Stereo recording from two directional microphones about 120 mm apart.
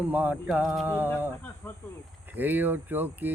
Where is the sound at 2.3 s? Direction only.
15° right (ahead or behind).